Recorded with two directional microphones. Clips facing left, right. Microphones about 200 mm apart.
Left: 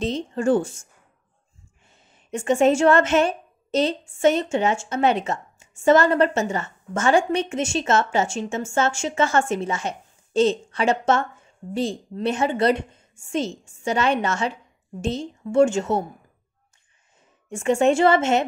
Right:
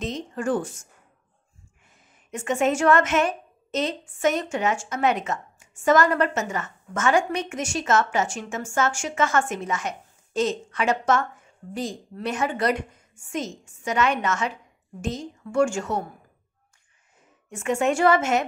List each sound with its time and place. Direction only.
0.0 s a woman's voice: 30° left (ahead or behind)
1.9 s a woman's voice: 30° left (ahead or behind)
17.5 s a woman's voice: 30° left (ahead or behind)